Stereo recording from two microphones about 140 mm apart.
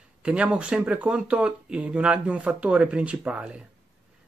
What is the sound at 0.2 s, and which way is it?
Speech, 5° right (ahead or behind).